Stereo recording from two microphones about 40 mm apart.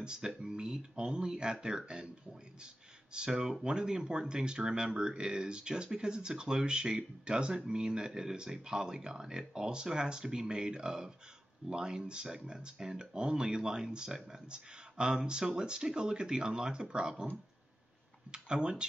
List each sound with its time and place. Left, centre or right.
0.0 s speech: centre
18.3 s speech: right